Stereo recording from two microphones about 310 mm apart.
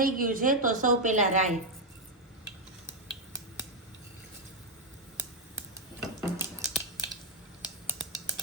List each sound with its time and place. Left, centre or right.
0.0 s a woman's voice: right
6.0 s scissors: centre